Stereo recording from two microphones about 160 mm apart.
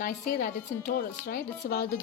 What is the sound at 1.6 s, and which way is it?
Speech, 75° left (ahead or behind).